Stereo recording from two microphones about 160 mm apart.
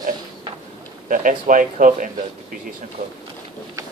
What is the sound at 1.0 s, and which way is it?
Speech, 55° right (ahead or behind).